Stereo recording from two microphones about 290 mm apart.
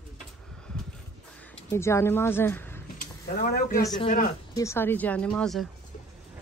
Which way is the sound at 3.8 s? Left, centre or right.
Centre.